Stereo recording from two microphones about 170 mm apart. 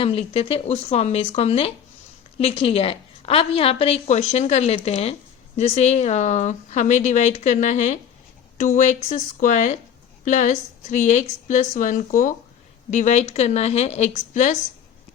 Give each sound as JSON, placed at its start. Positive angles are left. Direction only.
{"t": 0.0, "sound": "a woman's voice", "side_deg": 35}